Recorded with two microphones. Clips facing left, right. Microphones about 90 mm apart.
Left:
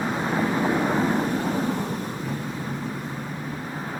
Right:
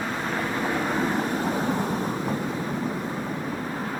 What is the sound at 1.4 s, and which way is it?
Vehicle, 10° right (ahead or behind).